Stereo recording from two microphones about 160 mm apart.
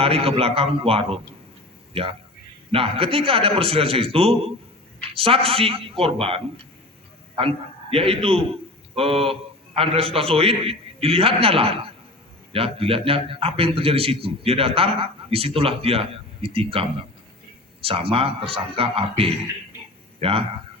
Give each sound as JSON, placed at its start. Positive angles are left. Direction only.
{"t": 0.0, "sound": "a man's voice", "side_deg": -35}
{"t": 17.8, "sound": "a man's voice", "side_deg": -35}